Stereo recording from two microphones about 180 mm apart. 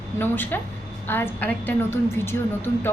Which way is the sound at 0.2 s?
10° left (ahead or behind).